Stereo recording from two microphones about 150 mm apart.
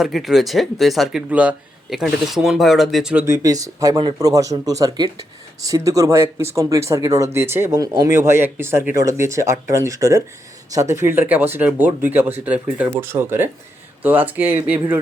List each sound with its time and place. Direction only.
0.0 s speech: centre (ahead or behind)
3.2 s speech: 20° right (ahead or behind)